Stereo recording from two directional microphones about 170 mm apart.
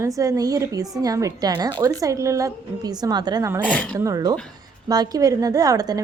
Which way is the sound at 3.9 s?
20° right (ahead or behind).